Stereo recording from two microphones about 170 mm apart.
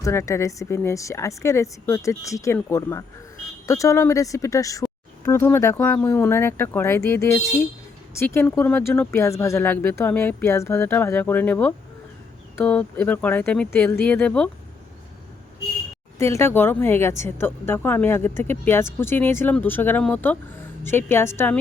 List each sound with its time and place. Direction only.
0.0 s speech: 15° left (ahead or behind)
16.1 s speech: 15° left (ahead or behind)